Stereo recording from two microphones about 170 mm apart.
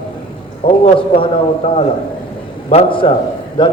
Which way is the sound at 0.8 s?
35° left (ahead or behind).